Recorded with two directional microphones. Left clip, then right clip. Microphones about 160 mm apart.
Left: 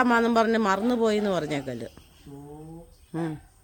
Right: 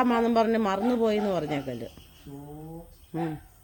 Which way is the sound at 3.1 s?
20° left (ahead or behind).